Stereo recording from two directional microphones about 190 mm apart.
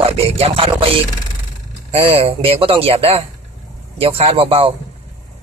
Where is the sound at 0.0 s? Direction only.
30° right (ahead or behind).